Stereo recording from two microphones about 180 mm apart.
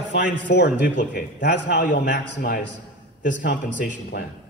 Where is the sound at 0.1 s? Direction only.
75° left (ahead or behind).